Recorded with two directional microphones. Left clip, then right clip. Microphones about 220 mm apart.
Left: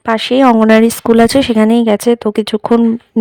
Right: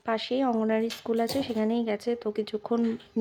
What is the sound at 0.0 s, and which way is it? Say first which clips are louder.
Speech: left 17 dB; 50° left (ahead or behind).